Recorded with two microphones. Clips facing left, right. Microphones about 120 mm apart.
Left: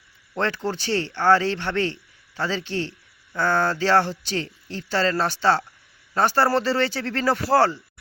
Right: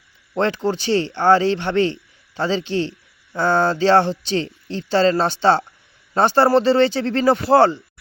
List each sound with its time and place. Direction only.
0.3 s a man's voice: 20° right (ahead or behind)